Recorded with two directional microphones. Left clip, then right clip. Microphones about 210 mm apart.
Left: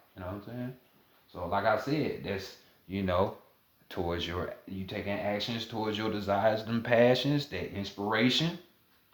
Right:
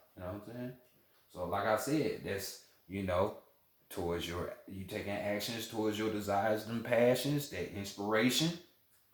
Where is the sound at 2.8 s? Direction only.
40° left (ahead or behind).